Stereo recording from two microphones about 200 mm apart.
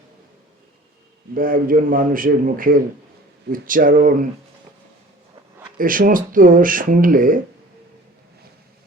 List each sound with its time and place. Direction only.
1.3 s speech: 45° right (ahead or behind)
5.7 s speech: 45° right (ahead or behind)